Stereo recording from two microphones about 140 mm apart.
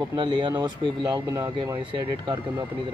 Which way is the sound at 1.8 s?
35° right (ahead or behind).